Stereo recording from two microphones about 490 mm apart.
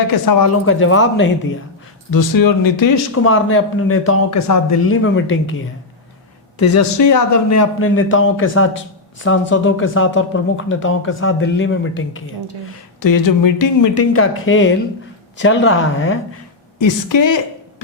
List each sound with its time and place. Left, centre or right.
0.1 s speech: left
2.0 s speech: left
3.2 s speech: left
13.0 s speech: left
16.7 s speech: left